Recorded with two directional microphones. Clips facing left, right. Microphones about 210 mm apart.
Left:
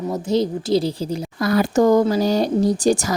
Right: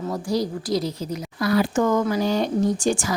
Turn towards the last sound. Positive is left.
turn(degrees=40)  # may be behind; listen again after turning